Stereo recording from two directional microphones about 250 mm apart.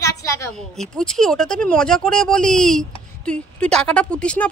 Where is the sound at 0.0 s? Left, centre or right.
Centre.